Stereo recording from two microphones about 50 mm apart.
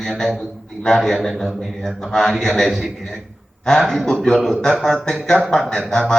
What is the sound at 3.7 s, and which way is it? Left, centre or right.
A man's voice, centre.